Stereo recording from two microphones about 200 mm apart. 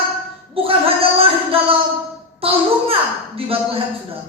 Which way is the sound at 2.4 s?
30° right (ahead or behind).